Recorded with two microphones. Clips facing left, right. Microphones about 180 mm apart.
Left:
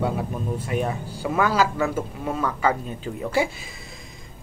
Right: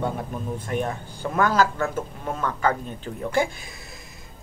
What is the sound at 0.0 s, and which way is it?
Speech, 10° left (ahead or behind).